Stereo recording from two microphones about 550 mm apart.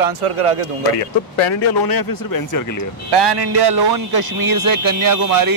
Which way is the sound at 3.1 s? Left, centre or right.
Right.